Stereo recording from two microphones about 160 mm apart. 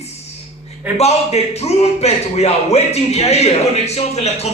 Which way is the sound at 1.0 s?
40° left (ahead or behind).